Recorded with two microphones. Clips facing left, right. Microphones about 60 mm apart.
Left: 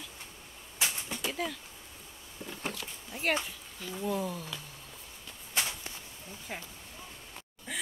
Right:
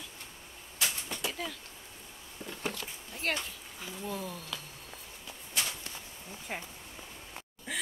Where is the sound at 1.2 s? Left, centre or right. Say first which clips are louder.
Left 4 dB; centre.